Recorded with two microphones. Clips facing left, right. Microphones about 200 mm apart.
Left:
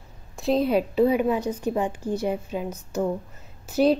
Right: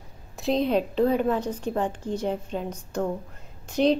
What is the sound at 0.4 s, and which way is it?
A woman's voice, 5° left (ahead or behind).